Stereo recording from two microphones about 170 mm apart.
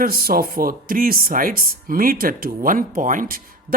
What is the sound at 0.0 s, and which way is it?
Speech, 60° right (ahead or behind).